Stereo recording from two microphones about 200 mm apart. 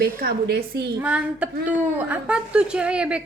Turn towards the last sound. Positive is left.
turn(degrees=-5)  # may be behind; listen again after turning